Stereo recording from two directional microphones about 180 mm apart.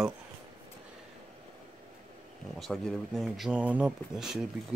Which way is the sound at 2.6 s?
Centre (ahead or behind).